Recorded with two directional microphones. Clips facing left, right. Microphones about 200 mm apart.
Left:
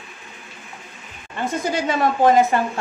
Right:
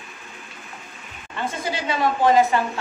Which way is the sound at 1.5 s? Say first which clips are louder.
Left 5 dB; 45° left (ahead or behind).